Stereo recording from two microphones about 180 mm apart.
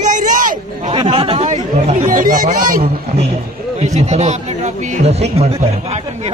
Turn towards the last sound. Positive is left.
turn(degrees=-35)  # may be behind; listen again after turning